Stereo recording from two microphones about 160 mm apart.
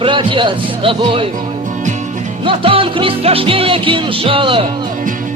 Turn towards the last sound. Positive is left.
turn(degrees=-30)  # may be behind; listen again after turning